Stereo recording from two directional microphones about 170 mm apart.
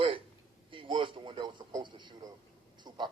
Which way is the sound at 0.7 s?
30° right (ahead or behind).